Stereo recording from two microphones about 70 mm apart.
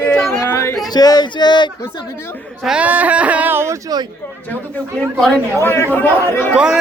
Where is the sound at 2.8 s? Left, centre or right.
Right.